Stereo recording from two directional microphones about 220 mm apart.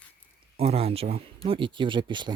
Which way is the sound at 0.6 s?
25° right (ahead or behind).